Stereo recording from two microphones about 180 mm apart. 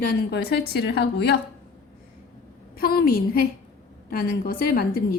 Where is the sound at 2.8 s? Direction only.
55° left (ahead or behind).